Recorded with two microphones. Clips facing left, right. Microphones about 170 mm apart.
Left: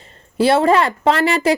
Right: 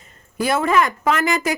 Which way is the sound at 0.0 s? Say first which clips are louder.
Left 7 dB; 30° left (ahead or behind).